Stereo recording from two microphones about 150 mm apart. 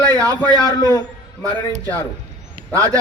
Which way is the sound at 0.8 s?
25° left (ahead or behind).